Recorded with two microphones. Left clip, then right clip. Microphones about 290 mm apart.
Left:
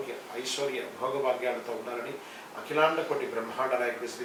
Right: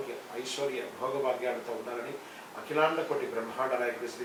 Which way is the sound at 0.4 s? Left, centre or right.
Centre.